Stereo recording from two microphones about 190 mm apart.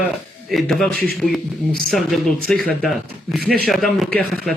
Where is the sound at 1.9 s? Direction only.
Centre (ahead or behind).